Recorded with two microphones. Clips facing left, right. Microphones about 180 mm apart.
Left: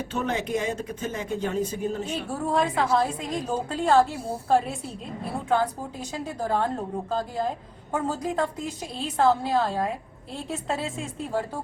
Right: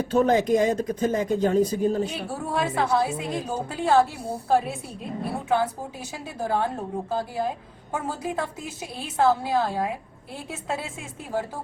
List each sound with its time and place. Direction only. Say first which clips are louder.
0.0 s speech: right 8 dB; 35° right (ahead or behind)
2.5 s a woman's voice: left 1 dB; 5° right (ahead or behind)